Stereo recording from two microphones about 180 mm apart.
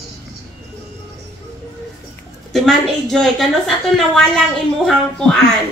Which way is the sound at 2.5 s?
Centre (ahead or behind).